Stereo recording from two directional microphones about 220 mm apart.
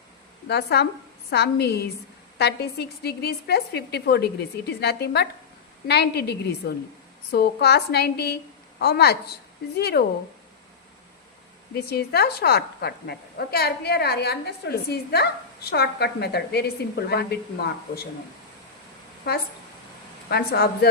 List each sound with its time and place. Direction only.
0.4 s a woman's voice: 50° left (ahead or behind)
11.9 s a woman's voice: 45° left (ahead or behind)
19.3 s a woman's voice: 45° left (ahead or behind)